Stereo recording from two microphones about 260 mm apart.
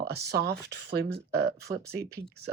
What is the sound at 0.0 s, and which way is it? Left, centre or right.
Speech, right.